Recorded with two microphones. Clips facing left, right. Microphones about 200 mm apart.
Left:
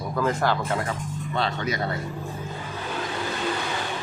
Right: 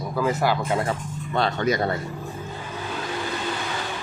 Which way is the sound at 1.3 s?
50° right (ahead or behind).